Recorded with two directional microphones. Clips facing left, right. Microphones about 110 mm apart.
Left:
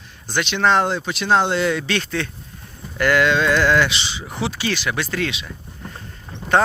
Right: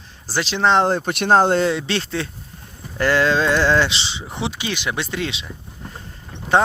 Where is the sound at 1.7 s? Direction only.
25° right (ahead or behind).